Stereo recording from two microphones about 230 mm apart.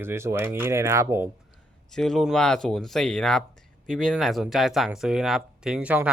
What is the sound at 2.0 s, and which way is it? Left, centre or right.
Speech, centre.